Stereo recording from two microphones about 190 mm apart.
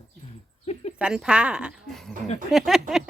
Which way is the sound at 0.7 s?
35° left (ahead or behind).